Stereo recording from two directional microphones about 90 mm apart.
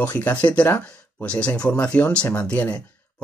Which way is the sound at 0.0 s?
25° left (ahead or behind).